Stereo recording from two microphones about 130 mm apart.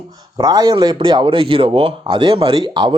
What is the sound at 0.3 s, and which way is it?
Speech, 30° right (ahead or behind).